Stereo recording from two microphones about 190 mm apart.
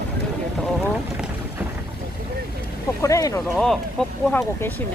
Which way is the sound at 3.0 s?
15° left (ahead or behind).